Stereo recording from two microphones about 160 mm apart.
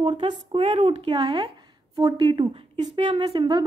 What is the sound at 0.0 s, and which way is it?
A woman's voice, 30° right (ahead or behind).